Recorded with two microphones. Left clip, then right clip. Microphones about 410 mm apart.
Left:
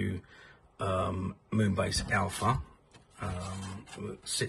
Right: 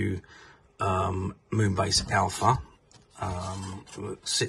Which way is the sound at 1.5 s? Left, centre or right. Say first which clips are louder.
Right 5 dB; centre.